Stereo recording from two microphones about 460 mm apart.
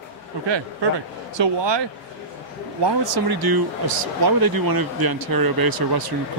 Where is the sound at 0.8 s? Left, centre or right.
Right.